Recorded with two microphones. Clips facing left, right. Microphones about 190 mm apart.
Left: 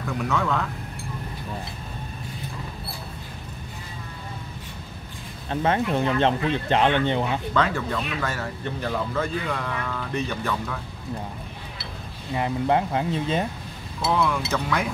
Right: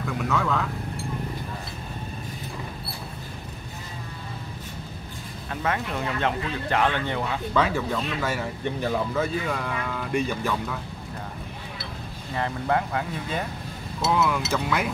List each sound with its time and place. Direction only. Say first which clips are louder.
0.2 s speech: left 1 dB; centre (ahead or behind)
5.5 s speech: left 5 dB; 30° left (ahead or behind)
7.5 s speech: right 2 dB; 10° right (ahead or behind)
12.4 s speech: left 3 dB; 20° left (ahead or behind)
14.0 s speech: even; 5° right (ahead or behind)